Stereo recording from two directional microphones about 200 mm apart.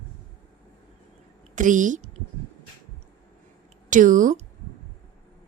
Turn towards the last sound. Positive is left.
turn(degrees=-40)  # may be behind; listen again after turning